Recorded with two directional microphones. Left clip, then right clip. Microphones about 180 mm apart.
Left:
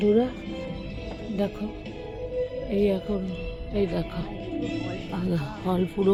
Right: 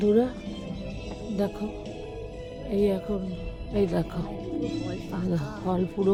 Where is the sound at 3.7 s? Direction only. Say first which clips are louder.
Right 1 dB; 5° right (ahead or behind).